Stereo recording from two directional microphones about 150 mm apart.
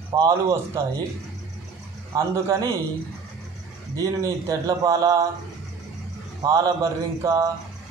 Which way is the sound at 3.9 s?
25° right (ahead or behind).